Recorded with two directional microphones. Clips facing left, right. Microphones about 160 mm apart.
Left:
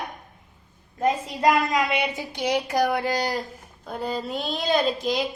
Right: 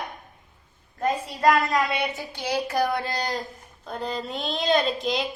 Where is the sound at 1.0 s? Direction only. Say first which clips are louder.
Left 2 dB; 15° left (ahead or behind).